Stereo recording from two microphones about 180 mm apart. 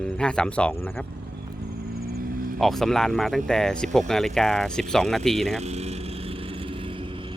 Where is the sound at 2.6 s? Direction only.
Centre (ahead or behind).